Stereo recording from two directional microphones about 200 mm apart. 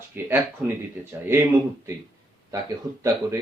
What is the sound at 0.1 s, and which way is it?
Speech, 10° right (ahead or behind).